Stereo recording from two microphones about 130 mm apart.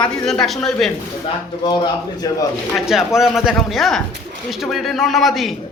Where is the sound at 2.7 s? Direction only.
Centre (ahead or behind).